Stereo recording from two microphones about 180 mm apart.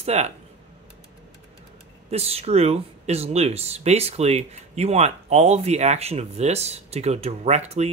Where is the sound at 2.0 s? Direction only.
35° right (ahead or behind).